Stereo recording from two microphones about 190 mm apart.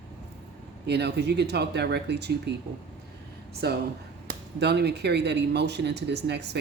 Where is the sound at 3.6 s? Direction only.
55° right (ahead or behind).